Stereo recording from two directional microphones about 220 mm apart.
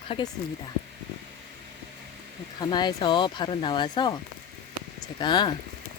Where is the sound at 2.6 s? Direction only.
20° left (ahead or behind).